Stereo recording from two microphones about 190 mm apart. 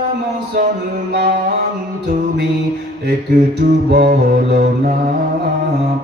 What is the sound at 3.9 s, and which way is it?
Mantra, 55° right (ahead or behind).